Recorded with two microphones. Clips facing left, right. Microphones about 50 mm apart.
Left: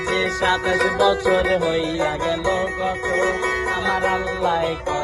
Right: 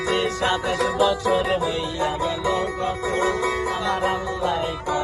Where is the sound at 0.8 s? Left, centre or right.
Left.